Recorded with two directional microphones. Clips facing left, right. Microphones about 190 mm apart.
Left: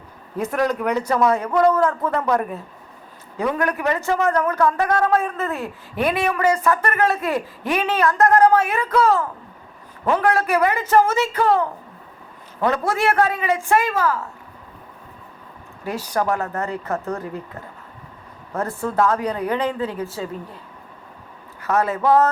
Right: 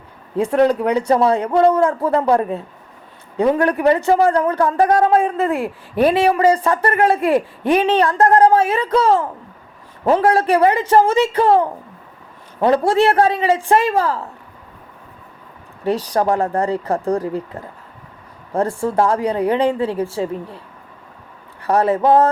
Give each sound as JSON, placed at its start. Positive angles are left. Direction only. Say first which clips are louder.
{"t": 0.3, "sound": "speech", "louder": "right 7 dB", "side_deg": -30}
{"t": 15.8, "sound": "speech", "louder": "right 5 dB", "side_deg": -30}
{"t": 21.6, "sound": "speech", "louder": "right 5 dB", "side_deg": -30}